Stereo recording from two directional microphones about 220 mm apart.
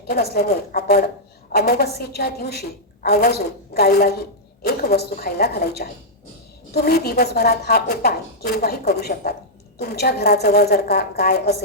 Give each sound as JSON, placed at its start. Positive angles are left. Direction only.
{"t": 0.1, "sound": "a woman's voice", "side_deg": 45}